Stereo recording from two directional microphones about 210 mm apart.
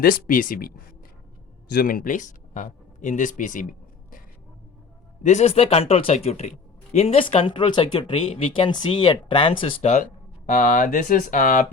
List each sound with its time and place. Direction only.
0.0 s speech: 45° left (ahead or behind)
1.7 s speech: 45° left (ahead or behind)
5.2 s speech: 35° left (ahead or behind)